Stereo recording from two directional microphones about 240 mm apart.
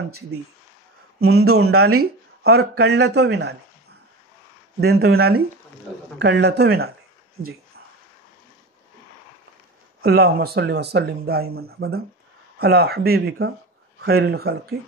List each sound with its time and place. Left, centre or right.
1.3 s speech: right
2.4 s a man's voice: right
4.7 s a man's voice: right
7.4 s speech: right
10.0 s speech: right